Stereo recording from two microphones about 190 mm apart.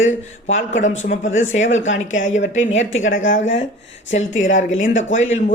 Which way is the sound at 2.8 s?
90° left.